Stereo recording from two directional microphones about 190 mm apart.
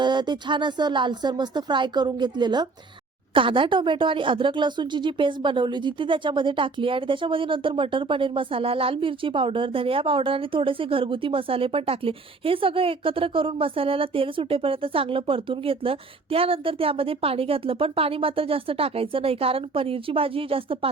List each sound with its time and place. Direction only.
0.0 s a woman's voice: 25° right (ahead or behind)